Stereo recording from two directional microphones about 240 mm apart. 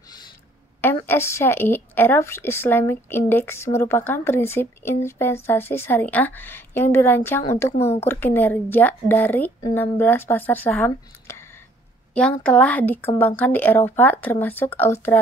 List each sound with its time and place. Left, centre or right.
1.0 s a woman's voice: centre
7.7 s a woman's voice: left
8.0 s a woman's voice: centre